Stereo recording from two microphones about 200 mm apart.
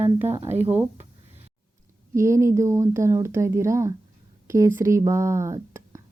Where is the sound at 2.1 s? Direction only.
15° right (ahead or behind).